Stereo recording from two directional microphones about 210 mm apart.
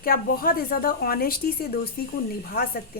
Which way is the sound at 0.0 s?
45° left (ahead or behind).